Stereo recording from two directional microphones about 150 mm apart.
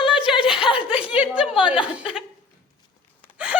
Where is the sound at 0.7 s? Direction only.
40° left (ahead or behind).